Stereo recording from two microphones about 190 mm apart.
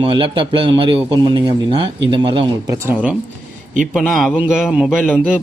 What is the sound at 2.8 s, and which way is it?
A man's voice, 5° right (ahead or behind).